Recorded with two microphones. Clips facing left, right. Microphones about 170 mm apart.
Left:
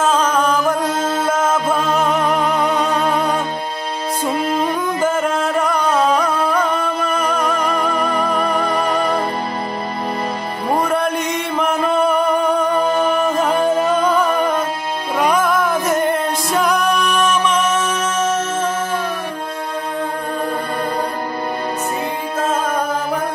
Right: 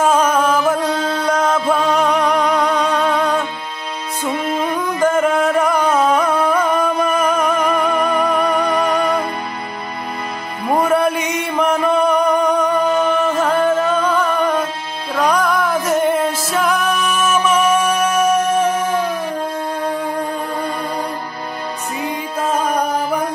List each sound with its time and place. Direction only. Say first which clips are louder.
0.0 s chant: right 2 dB; 10° right (ahead or behind)
1.1 s music: right 1 dB; centre (ahead or behind)
4.3 s music: even; 40° left (ahead or behind)
5.0 s music: right 5 dB; centre (ahead or behind)
10.9 s music: right 2 dB; 5° right (ahead or behind)